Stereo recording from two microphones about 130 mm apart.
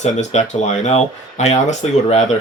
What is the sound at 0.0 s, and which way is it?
Speech, 60° left (ahead or behind).